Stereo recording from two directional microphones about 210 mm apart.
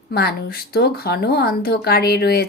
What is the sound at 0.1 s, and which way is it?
Speech, 50° left (ahead or behind).